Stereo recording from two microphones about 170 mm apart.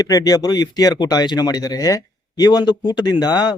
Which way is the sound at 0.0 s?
20° left (ahead or behind).